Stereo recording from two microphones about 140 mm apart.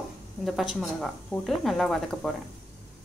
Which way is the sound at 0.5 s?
Centre (ahead or behind).